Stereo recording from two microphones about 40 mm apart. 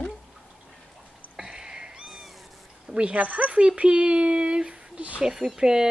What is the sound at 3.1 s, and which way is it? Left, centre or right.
Speech, right.